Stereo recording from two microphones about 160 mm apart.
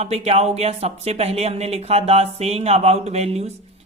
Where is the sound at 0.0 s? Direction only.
40° right (ahead or behind).